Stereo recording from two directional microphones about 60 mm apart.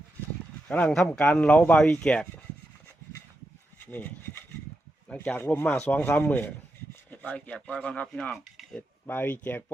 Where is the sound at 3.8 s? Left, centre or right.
Left.